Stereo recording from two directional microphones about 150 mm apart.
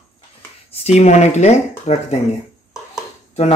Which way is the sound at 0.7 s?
45° left (ahead or behind).